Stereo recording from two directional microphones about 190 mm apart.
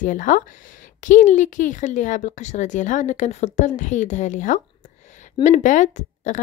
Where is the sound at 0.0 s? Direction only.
45° left (ahead or behind).